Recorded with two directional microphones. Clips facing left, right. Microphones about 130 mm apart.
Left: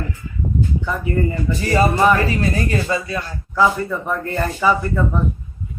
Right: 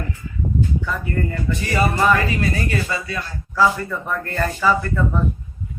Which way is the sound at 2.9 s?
20° left (ahead or behind).